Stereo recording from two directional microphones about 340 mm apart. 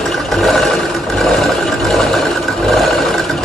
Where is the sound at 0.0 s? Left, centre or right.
Centre.